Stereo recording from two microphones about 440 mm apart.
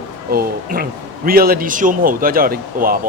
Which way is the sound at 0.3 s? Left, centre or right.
Right.